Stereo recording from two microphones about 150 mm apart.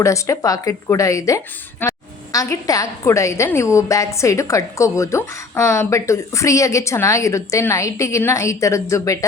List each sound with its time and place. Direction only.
0.0 s a woman's voice: 20° left (ahead or behind)